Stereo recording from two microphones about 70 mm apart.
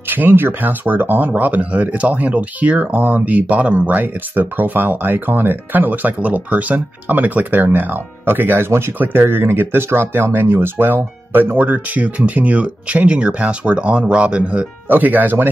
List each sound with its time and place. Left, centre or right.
0.1 s speech: right